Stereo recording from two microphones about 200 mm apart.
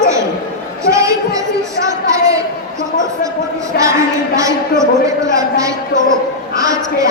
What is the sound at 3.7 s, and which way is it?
Speech, 50° left (ahead or behind).